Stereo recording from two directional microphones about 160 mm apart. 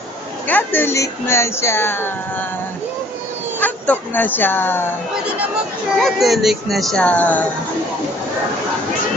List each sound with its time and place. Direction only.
0.4 s speech: 10° left (ahead or behind)
3.6 s speech: 10° left (ahead or behind)
6.0 s speech: centre (ahead or behind)